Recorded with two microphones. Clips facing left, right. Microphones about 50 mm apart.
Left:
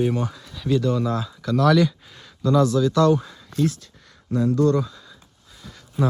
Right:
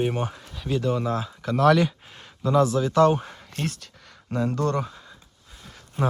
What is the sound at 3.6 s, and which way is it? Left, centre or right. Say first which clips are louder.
Speech: left 5 dB; right.